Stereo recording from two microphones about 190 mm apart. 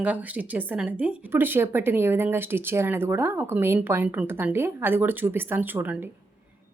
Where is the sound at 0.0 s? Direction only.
10° right (ahead or behind).